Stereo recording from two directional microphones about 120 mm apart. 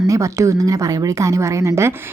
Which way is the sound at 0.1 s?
25° right (ahead or behind).